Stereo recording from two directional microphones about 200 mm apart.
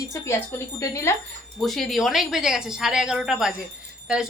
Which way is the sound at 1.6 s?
Centre (ahead or behind).